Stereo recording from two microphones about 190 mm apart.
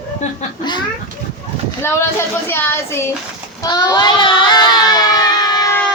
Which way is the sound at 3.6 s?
20° left (ahead or behind).